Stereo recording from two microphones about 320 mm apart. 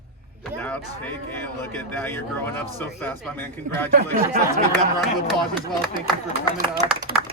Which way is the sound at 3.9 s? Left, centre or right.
Right.